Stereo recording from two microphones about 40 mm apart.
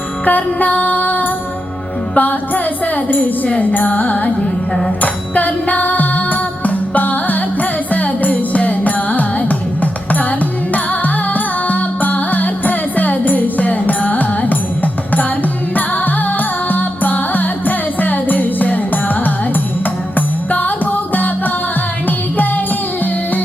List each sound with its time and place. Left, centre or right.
0.3 s music: left
3.8 s carnatic music: left
4.4 s music: centre
5.0 s music: left
15.7 s music: left